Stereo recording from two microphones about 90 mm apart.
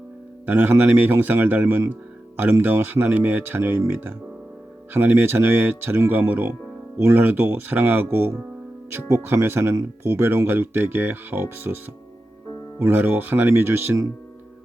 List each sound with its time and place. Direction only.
0.4 s speech: 25° right (ahead or behind)
12.8 s speech: 25° right (ahead or behind)